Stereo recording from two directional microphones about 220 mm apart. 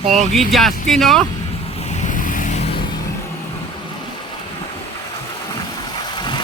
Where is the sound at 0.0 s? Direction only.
35° right (ahead or behind).